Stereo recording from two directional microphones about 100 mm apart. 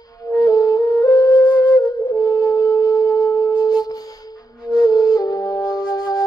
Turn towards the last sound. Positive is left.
turn(degrees=40)  # may be behind; listen again after turning